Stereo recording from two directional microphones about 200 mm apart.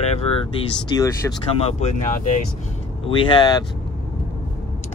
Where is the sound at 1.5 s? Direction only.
30° left (ahead or behind).